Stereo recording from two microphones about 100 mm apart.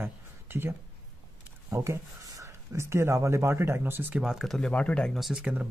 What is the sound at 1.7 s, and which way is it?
Speech, 30° right (ahead or behind).